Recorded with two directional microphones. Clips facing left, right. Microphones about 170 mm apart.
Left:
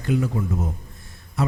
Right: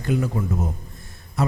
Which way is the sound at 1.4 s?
40° right (ahead or behind).